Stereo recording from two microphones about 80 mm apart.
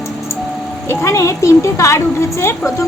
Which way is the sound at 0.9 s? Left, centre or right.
Left.